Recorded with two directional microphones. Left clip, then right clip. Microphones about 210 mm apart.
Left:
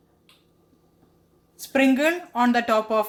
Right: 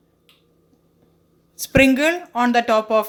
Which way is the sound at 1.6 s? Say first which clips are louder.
Right 5 dB; 25° right (ahead or behind).